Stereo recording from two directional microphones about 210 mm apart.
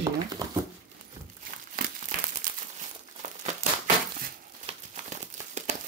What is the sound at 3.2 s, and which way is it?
Crumpling, 35° right (ahead or behind).